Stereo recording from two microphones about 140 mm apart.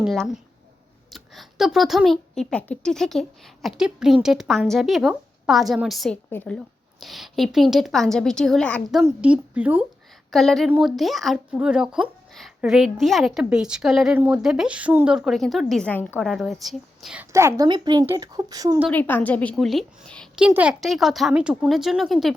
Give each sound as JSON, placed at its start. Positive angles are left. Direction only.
{"t": 0.0, "sound": "speech", "side_deg": 0}
{"t": 6.3, "sound": "a woman's voice", "side_deg": 10}
{"t": 7.0, "sound": "speech", "side_deg": 0}
{"t": 9.0, "sound": "a woman's voice", "side_deg": -10}
{"t": 10.3, "sound": "speech", "side_deg": 0}
{"t": 15.9, "sound": "a woman's voice", "side_deg": 10}
{"t": 16.3, "sound": "speech", "side_deg": 0}
{"t": 17.2, "sound": "speech", "side_deg": -20}
{"t": 17.7, "sound": "speech", "side_deg": -30}
{"t": 18.9, "sound": "a woman's voice", "side_deg": 15}
{"t": 20.3, "sound": "a woman's voice", "side_deg": -10}